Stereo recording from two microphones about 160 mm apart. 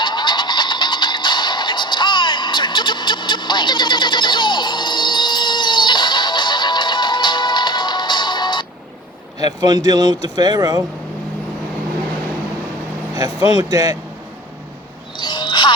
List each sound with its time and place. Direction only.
0.0 s music: 30° left (ahead or behind)
9.6 s speech: 25° right (ahead or behind)
13.1 s speech: 25° right (ahead or behind)
15.2 s a sound: 30° left (ahead or behind)